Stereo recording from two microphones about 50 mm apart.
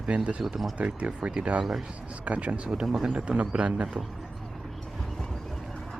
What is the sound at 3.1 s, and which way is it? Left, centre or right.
Speech, right.